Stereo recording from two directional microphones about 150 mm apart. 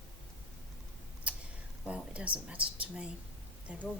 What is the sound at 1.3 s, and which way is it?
Tick, 10° right (ahead or behind).